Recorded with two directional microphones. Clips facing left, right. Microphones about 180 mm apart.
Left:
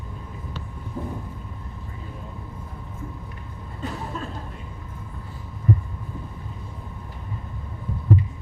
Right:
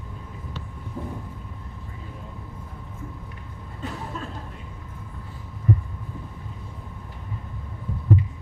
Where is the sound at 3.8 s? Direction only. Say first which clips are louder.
Left 2 dB; 35° left (ahead or behind).